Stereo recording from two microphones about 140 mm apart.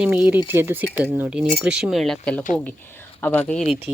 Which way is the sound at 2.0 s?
5° left (ahead or behind).